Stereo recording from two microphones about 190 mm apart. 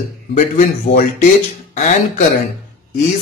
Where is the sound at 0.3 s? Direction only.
40° left (ahead or behind).